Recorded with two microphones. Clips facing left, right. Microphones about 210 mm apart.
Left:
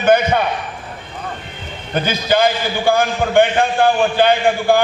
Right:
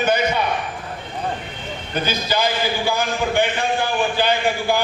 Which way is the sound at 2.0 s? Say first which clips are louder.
Left 6 dB; 55° left (ahead or behind).